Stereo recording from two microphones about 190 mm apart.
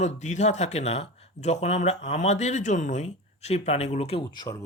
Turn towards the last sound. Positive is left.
turn(degrees=20)  # may be behind; listen again after turning